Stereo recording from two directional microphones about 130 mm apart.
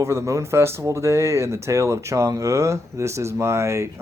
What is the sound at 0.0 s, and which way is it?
Speech, 20° right (ahead or behind).